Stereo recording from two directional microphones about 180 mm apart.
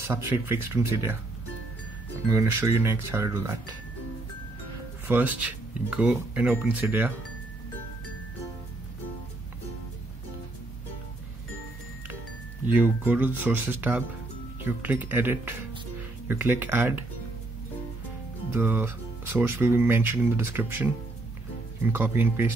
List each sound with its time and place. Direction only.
0.0 s speech: 15° right (ahead or behind)
2.3 s speech: 15° right (ahead or behind)
5.0 s speech: 10° right (ahead or behind)
12.6 s speech: 10° right (ahead or behind)
18.5 s speech: 10° right (ahead or behind)